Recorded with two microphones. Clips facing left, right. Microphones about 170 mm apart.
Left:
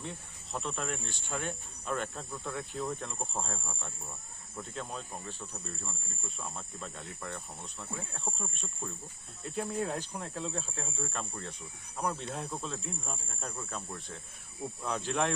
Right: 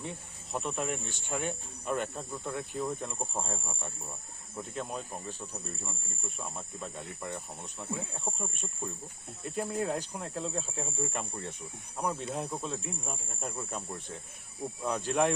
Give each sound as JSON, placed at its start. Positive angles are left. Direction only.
{"t": 0.0, "sound": "speech", "side_deg": -10}
{"t": 9.4, "sound": "speech", "side_deg": 0}
{"t": 14.8, "sound": "speech", "side_deg": -5}